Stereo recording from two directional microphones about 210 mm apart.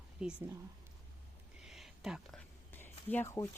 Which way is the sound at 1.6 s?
Centre (ahead or behind).